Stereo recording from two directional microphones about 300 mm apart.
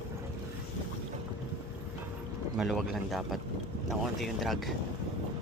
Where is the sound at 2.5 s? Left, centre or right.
Centre.